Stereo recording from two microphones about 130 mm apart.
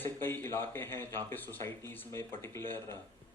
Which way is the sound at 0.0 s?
15° left (ahead or behind).